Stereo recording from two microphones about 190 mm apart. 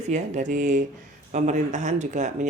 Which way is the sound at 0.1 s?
40° right (ahead or behind).